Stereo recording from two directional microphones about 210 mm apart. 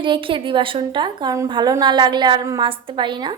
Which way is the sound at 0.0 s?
25° right (ahead or behind).